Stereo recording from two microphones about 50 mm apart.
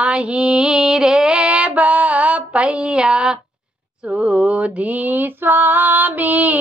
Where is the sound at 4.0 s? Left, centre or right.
Right.